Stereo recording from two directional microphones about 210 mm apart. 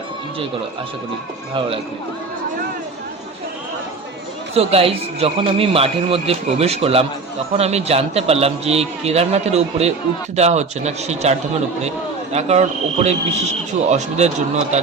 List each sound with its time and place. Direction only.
4.5 s a man's voice: 30° right (ahead or behind)